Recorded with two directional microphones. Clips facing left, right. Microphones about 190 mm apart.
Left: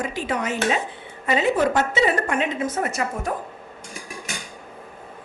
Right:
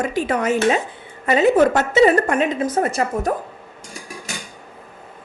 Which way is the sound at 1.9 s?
45° right (ahead or behind).